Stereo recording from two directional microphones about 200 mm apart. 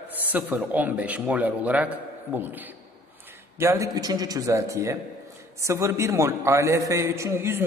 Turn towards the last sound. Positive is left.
turn(degrees=-10)  # may be behind; listen again after turning